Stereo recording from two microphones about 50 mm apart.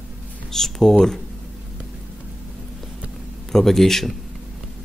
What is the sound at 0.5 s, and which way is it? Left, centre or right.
Speech, centre.